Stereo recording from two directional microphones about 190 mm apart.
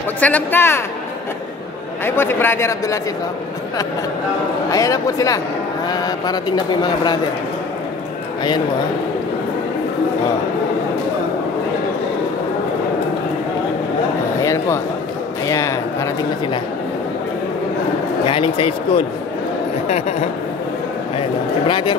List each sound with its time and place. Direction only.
0.2 s speech: 10° left (ahead or behind)
2.0 s speech: 10° left (ahead or behind)
4.6 s speech: 20° left (ahead or behind)
14.4 s a sound: 15° left (ahead or behind)
18.2 s speech: 30° left (ahead or behind)